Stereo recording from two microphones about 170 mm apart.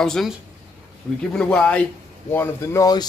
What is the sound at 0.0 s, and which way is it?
Speech, 5° left (ahead or behind).